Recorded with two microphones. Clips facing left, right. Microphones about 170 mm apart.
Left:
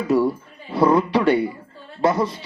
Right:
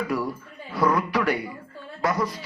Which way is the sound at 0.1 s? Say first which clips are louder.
Left 9 dB; 25° left (ahead or behind).